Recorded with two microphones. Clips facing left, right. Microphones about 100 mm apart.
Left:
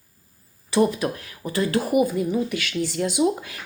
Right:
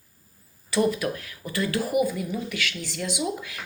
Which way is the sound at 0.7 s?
25° left (ahead or behind).